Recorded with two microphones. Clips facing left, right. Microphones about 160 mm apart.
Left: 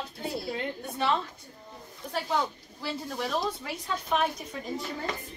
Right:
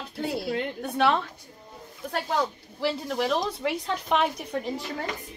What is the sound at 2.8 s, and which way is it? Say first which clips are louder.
A woman's voice: right 7 dB; 80° right.